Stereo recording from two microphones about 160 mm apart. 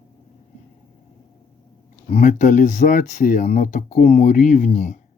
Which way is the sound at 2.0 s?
45° left (ahead or behind).